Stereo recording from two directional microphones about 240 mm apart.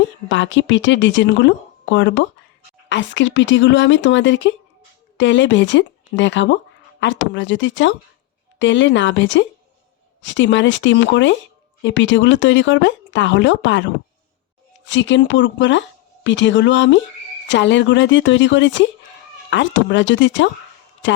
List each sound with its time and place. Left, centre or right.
0.3 s speech: left